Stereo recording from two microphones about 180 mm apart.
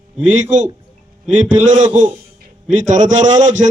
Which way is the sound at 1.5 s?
45° right (ahead or behind).